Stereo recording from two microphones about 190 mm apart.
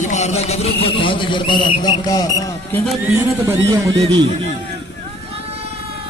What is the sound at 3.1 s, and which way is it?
Speech, 15° right (ahead or behind).